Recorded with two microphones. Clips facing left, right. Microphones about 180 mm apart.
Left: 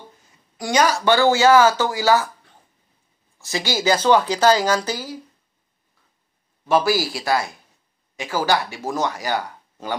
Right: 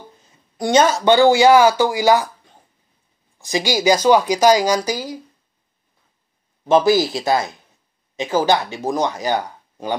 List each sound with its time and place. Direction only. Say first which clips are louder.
0.2 s a woman's voice: right 8 dB; 25° right (ahead or behind)
6.7 s speech: right 5 dB; 20° right (ahead or behind)